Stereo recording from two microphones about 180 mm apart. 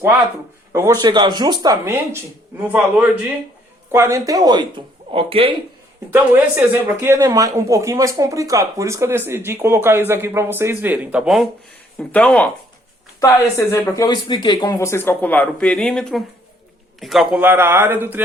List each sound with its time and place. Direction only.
0.7 s speech: 15° right (ahead or behind)
2.6 s speech: 10° right (ahead or behind); by 5.5 s 30° right (ahead or behind)
6.1 s speech: 10° right (ahead or behind)
11.9 s speech: 10° left (ahead or behind); by 18.2 s 10° right (ahead or behind)